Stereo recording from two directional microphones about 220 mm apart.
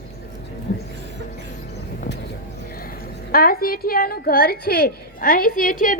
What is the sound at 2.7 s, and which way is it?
A woman's voice, 40° left (ahead or behind).